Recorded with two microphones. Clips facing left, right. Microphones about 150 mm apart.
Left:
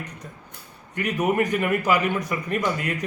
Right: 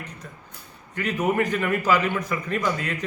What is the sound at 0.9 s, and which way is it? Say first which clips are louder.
A man's voice: left 1 dB; 15° left (ahead or behind).